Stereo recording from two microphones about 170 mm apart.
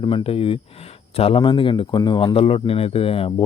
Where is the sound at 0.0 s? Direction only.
30° left (ahead or behind).